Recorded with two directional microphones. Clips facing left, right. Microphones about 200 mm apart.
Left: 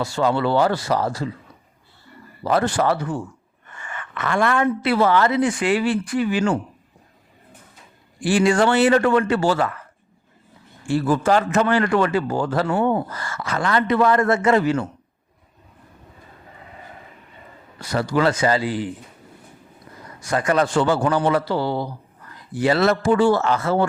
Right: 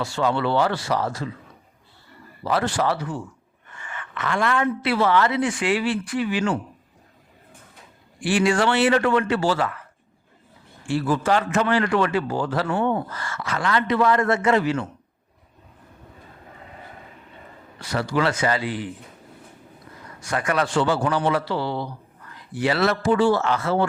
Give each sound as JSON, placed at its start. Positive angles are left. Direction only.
{"t": 0.0, "sound": "a man's voice", "side_deg": 40}
{"t": 2.4, "sound": "a woman's voice", "side_deg": 45}
{"t": 8.2, "sound": "a man's voice", "side_deg": 40}
{"t": 10.8, "sound": "a woman's voice", "side_deg": 45}
{"t": 17.7, "sound": "a man's voice", "side_deg": 40}
{"t": 20.3, "sound": "a woman's voice", "side_deg": 35}